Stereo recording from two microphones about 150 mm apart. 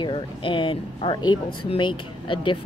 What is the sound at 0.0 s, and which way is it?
Speech, 35° left (ahead or behind).